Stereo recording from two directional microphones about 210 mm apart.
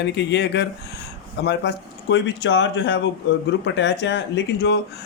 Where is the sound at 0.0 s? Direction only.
55° left (ahead or behind).